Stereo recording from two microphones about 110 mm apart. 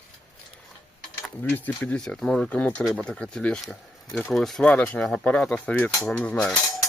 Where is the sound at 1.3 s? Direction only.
15° left (ahead or behind).